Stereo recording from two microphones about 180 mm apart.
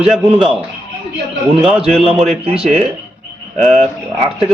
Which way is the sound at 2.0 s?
35° right (ahead or behind).